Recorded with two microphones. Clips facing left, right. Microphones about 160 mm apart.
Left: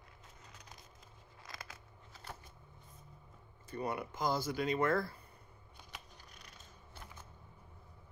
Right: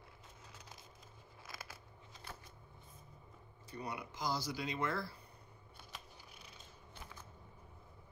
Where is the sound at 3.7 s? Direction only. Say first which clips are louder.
Left 6 dB; 55° left (ahead or behind).